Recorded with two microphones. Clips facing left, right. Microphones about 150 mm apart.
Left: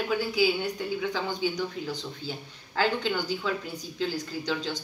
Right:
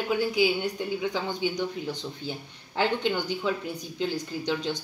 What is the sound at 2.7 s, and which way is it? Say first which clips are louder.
Speech: right 1 dB; 20° right (ahead or behind).